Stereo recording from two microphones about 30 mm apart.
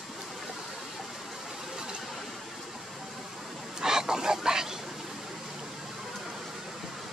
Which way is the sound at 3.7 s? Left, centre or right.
Right.